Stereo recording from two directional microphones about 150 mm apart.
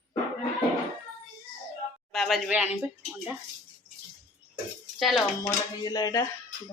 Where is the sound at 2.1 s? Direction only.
Centre (ahead or behind).